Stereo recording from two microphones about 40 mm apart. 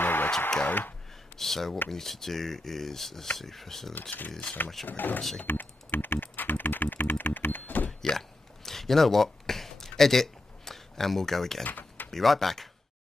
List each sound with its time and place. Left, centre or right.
0.0 s a sound: left
0.7 s speech: left
1.3 s speech: centre
4.1 s speech: left
5.5 s typing: left
8.0 s a sound: centre
11.6 s typing: left
12.1 s speech: centre